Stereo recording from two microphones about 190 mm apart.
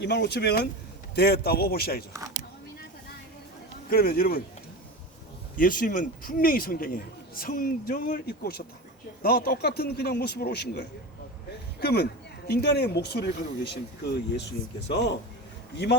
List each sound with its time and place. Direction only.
0.0 s speech: 60° left (ahead or behind)
3.8 s a man's voice: 50° left (ahead or behind)
5.5 s a man's voice: 45° left (ahead or behind); by 15.1 s 65° left (ahead or behind)